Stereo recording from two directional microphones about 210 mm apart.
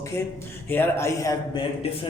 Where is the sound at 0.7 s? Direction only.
10° left (ahead or behind).